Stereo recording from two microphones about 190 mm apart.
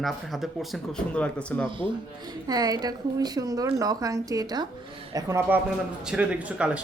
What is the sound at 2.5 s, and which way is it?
A woman's voice, 20° right (ahead or behind).